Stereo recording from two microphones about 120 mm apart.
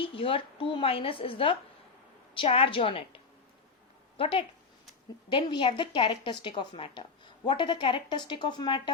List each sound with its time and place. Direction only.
0.0 s a woman's voice: 50° left (ahead or behind)
4.2 s a woman's voice: 45° left (ahead or behind)